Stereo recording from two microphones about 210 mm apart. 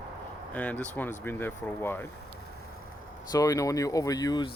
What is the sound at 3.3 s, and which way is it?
Speech, 15° left (ahead or behind).